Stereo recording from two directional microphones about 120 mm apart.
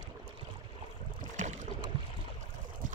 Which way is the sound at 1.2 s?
85° right.